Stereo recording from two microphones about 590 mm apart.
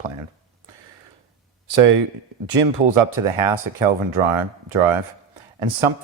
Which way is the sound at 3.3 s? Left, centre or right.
Right.